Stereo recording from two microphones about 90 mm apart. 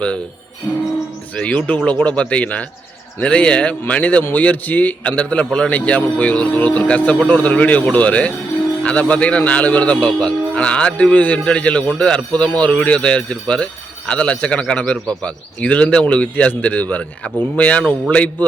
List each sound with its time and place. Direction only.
1.4 s a man's voice: 15° left (ahead or behind)